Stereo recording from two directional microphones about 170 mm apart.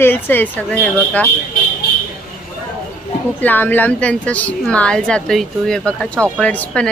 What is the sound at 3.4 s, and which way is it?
A woman's voice, 10° left (ahead or behind).